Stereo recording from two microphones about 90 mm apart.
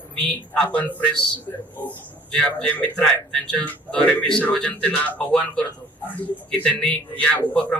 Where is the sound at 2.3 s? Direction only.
10° left (ahead or behind).